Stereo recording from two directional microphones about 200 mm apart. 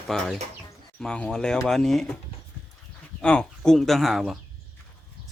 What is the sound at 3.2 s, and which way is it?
Speech, 5° left (ahead or behind).